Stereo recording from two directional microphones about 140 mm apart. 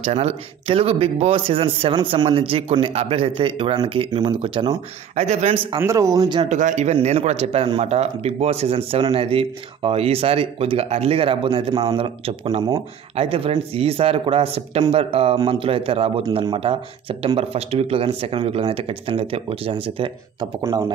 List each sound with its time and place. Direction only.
0.1 s speech: 50° right (ahead or behind)
5.1 s speech: 55° right (ahead or behind)
5.8 s speech: 20° right (ahead or behind)
6.5 s speech: 55° right (ahead or behind); by 20.4 s 35° right (ahead or behind)